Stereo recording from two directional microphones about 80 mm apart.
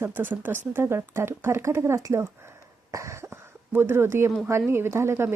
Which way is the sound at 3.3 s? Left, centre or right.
Right.